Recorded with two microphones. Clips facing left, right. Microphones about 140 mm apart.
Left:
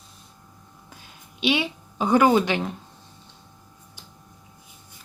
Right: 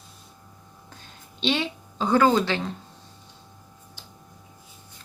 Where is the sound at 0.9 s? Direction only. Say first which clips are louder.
Even; 10° left (ahead or behind).